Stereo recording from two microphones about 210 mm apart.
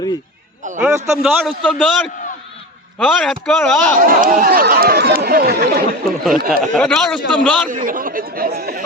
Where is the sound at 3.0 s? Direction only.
Centre (ahead or behind).